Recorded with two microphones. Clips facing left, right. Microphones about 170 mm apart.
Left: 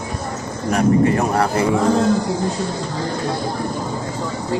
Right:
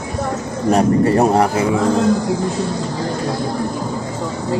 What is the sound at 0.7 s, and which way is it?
Speech, 30° right (ahead or behind).